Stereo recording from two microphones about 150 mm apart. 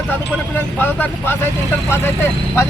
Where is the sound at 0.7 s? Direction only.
10° left (ahead or behind).